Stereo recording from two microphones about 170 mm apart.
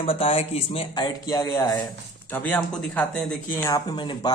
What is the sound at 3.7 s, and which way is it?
Speech, 25° left (ahead or behind).